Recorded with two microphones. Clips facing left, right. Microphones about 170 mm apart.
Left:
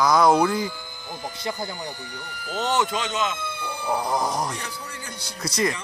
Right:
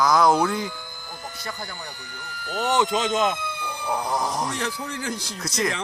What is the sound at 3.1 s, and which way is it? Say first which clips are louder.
Speech: right 5 dB; 50° right (ahead or behind).